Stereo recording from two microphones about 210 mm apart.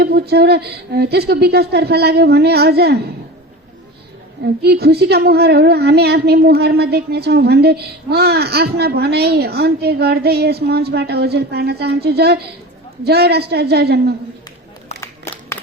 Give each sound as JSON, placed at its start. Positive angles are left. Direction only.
{"t": 0.0, "sound": "a woman's voice", "side_deg": -50}
{"t": 4.6, "sound": "a woman's voice", "side_deg": -50}